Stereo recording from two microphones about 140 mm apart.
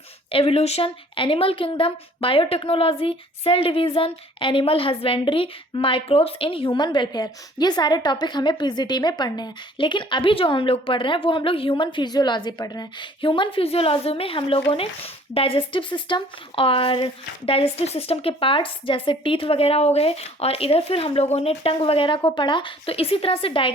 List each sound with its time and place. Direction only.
0.3 s a woman's voice: 45° left (ahead or behind)